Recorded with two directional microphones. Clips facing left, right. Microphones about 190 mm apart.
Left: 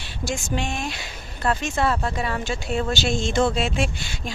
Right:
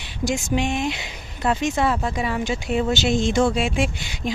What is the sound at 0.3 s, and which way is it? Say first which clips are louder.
Speech: right 4 dB; 15° right (ahead or behind).